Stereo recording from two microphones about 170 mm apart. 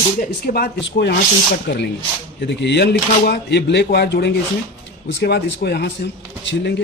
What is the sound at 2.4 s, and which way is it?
Speech, 90° left.